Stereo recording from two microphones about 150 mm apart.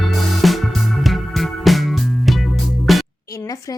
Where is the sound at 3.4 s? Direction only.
20° left (ahead or behind).